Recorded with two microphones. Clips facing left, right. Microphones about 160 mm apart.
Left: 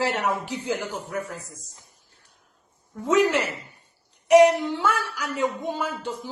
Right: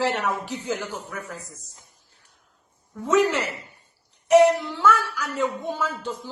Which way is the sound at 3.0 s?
10° left (ahead or behind).